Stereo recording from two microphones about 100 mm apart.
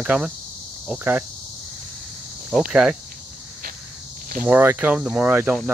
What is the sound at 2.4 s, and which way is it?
Speech, 5° right (ahead or behind).